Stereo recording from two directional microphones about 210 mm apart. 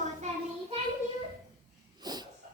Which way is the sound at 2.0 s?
20° right (ahead or behind).